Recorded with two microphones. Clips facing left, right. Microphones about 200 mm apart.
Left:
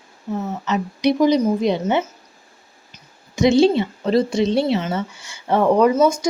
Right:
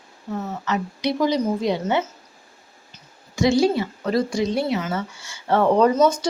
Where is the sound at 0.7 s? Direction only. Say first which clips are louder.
Left 5 dB; 20° left (ahead or behind).